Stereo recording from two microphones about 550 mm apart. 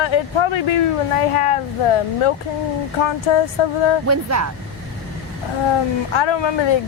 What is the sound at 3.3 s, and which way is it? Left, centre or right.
Speech, left.